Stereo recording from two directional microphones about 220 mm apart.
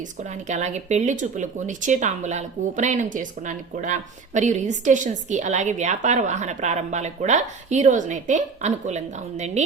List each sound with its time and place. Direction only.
0.0 s a woman's voice: 30° right (ahead or behind)